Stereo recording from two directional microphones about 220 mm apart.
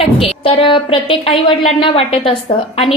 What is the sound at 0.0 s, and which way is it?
A woman's voice, 25° left (ahead or behind).